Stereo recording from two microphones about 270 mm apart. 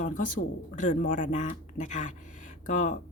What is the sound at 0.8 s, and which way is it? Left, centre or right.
Speech, left.